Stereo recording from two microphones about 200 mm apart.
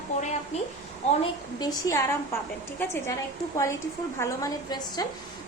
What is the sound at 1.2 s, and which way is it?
Speech, 20° left (ahead or behind).